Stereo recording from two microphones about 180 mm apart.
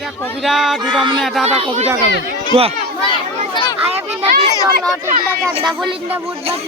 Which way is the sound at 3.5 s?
25° left (ahead or behind).